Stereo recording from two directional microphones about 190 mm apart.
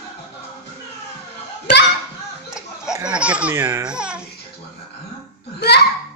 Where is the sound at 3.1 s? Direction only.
5° right (ahead or behind).